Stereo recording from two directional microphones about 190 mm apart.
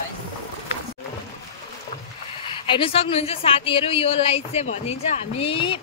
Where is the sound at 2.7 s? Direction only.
30° left (ahead or behind).